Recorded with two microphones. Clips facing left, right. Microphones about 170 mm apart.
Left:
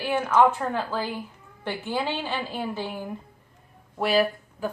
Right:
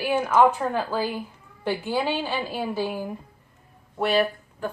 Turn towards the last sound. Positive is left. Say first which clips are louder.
# even
turn(degrees=0)  # may be behind; listen again after turning